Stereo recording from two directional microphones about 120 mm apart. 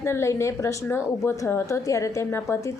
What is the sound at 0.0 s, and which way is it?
A woman's voice, 25° left (ahead or behind).